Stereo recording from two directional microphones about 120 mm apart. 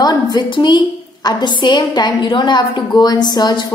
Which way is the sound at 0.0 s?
35° left (ahead or behind).